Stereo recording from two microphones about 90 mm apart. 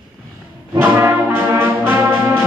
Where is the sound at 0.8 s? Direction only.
25° right (ahead or behind).